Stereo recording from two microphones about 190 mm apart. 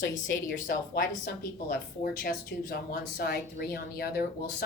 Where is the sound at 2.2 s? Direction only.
50° left (ahead or behind).